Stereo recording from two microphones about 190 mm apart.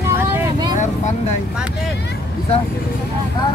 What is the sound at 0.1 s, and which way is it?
Vehicle, 20° right (ahead or behind).